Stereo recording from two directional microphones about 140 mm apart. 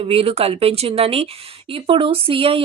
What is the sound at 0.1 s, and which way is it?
A woman's voice, 45° right (ahead or behind).